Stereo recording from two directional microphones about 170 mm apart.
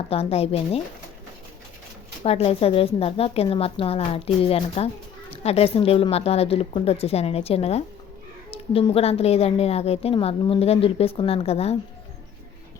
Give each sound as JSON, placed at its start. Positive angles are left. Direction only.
{"t": 0.1, "sound": "a woman's voice", "side_deg": 35}
{"t": 2.2, "sound": "a woman's voice", "side_deg": 35}